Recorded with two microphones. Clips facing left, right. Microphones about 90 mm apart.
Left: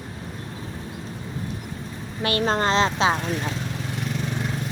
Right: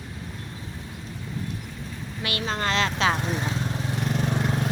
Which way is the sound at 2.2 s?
35° left (ahead or behind).